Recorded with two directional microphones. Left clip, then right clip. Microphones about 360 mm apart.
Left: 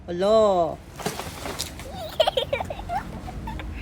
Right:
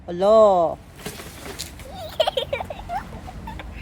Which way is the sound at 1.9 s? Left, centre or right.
Centre.